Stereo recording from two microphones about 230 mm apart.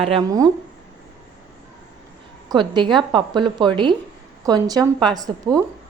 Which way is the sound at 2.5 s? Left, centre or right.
Centre.